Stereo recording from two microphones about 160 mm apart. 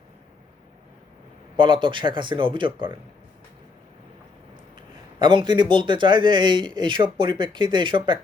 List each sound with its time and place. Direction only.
1.5 s speech: 30° right (ahead or behind)
5.2 s speech: 30° right (ahead or behind)